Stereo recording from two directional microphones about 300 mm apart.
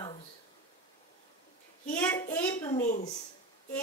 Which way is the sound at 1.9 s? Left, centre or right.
Centre.